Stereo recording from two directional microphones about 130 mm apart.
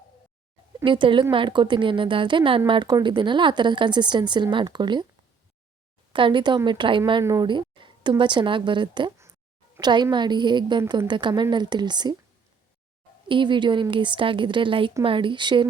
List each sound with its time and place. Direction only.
0.9 s a woman's voice: 40° right (ahead or behind)
6.1 s a woman's voice: 40° right (ahead or behind)
7.4 s a sound: 40° right (ahead or behind)
8.2 s a woman's voice: 40° right (ahead or behind)
13.2 s a woman's voice: 40° right (ahead or behind)